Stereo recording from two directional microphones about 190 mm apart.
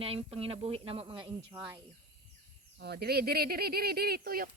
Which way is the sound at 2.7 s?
60° right (ahead or behind).